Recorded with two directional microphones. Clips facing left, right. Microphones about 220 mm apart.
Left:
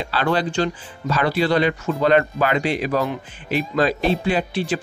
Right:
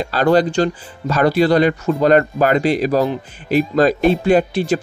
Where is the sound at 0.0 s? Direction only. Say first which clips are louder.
Right 7 dB; 40° right (ahead or behind).